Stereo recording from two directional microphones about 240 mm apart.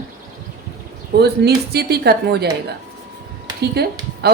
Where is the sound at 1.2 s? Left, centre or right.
Right.